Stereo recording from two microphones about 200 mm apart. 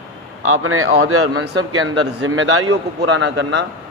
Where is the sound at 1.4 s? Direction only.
70° right (ahead or behind).